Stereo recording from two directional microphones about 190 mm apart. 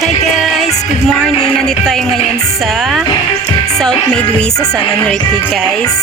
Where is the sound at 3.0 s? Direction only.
20° left (ahead or behind).